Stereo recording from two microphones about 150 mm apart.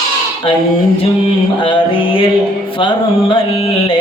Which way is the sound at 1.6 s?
35° left (ahead or behind).